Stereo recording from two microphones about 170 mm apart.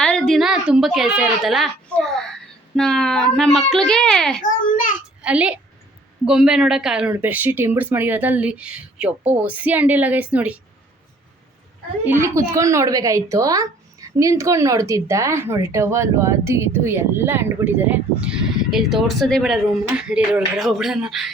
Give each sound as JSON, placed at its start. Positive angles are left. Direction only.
{"t": 0.0, "sound": "a sound", "side_deg": 5}
{"t": 2.7, "sound": "speech", "side_deg": 5}
{"t": 4.4, "sound": "a child's voice", "side_deg": 50}
{"t": 5.2, "sound": "a woman's voice", "side_deg": -5}
{"t": 12.0, "sound": "speech", "side_deg": -15}